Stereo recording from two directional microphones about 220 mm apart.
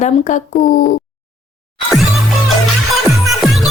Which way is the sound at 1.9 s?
Centre (ahead or behind).